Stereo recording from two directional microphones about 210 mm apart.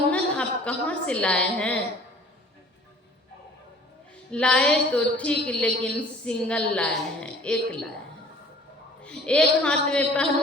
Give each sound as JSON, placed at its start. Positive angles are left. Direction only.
{"t": 0.1, "sound": "a woman's voice", "side_deg": 5}
{"t": 4.3, "sound": "a woman's voice", "side_deg": 5}
{"t": 9.0, "sound": "a woman's voice", "side_deg": 5}